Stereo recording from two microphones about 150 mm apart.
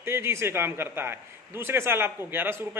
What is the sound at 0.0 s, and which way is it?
A man's voice, 15° right (ahead or behind).